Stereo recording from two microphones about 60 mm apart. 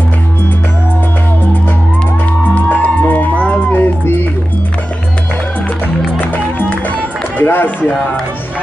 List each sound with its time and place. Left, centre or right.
2.5 s music: left
6.1 s music: left
7.3 s run: left